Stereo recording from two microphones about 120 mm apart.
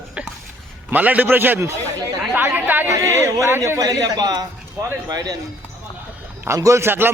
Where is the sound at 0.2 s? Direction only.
10° right (ahead or behind).